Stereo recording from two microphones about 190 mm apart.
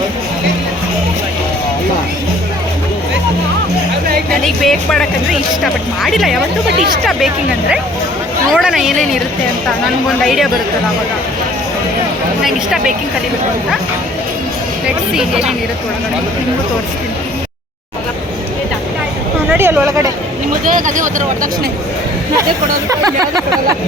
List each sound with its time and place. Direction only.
4.4 s speech: centre (ahead or behind)
8.5 s speech: centre (ahead or behind)
10.2 s speech: centre (ahead or behind)
12.5 s speech: centre (ahead or behind)
15.1 s speech: 5° right (ahead or behind)
19.5 s speech: 10° right (ahead or behind)
20.7 s speech: 45° right (ahead or behind)